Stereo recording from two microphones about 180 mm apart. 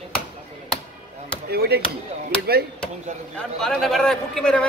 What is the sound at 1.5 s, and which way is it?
Speech, 60° right (ahead or behind).